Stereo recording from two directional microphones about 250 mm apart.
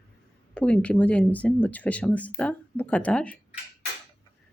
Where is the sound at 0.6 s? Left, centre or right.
Centre.